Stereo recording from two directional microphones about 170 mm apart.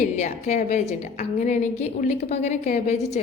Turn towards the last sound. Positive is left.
turn(degrees=40)  # may be behind; listen again after turning